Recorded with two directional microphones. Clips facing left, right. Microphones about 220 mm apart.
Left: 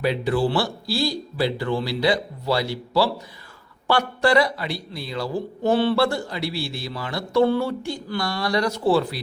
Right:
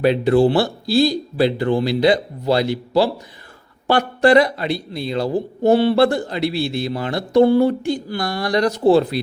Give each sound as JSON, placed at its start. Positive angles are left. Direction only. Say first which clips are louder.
{"t": 0.3, "sound": "speech", "louder": "right 7 dB", "side_deg": -25}